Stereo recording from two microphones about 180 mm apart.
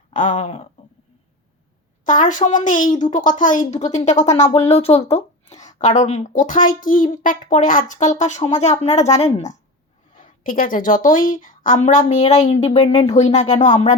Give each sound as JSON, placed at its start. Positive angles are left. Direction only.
{"t": 0.1, "sound": "a woman's voice", "side_deg": 45}
{"t": 2.0, "sound": "a woman's voice", "side_deg": 45}